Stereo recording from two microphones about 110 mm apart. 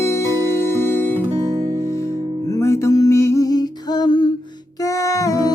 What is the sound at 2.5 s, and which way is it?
Music, 25° left (ahead or behind).